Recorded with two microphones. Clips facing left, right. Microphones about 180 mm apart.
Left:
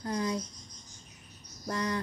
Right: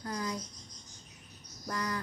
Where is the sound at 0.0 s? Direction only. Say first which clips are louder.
Left 5 dB; 25° left (ahead or behind).